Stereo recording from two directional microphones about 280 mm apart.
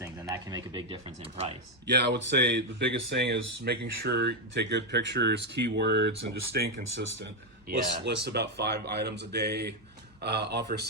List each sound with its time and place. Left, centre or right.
0.0 s speech: centre
1.9 s speech: right